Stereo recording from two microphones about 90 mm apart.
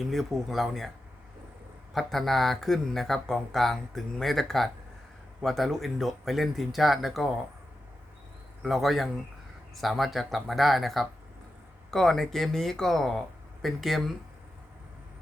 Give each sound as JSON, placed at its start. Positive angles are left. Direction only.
{"t": 0.0, "sound": "speech", "side_deg": 0}
{"t": 1.9, "sound": "speech", "side_deg": 0}
{"t": 8.6, "sound": "speech", "side_deg": 0}